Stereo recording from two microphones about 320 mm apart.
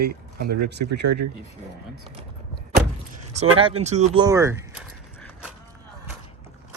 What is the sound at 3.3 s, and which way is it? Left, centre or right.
Speech, centre.